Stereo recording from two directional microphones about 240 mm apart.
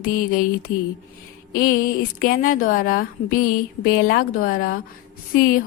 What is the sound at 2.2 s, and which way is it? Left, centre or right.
A woman's voice, left.